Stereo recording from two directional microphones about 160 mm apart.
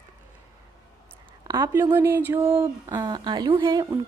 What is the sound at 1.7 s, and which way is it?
Speech, 15° right (ahead or behind).